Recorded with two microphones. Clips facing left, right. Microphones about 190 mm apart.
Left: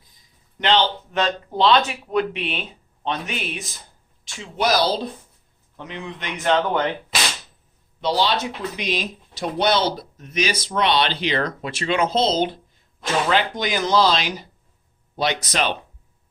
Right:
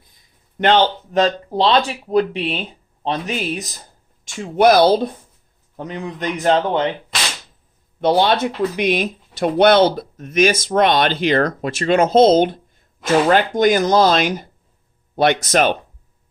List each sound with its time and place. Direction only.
0.6 s speech: 50° right (ahead or behind)
1.1 s speech: 35° right (ahead or behind)
4.3 s speech: 50° right (ahead or behind)
5.7 s speech: 40° right (ahead or behind)
8.0 s speech: 55° right (ahead or behind)